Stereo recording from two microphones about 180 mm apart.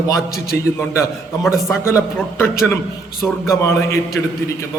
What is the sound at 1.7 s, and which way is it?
A man's voice, 15° left (ahead or behind).